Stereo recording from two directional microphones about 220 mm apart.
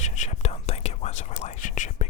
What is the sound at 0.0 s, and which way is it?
Whispering, 30° left (ahead or behind).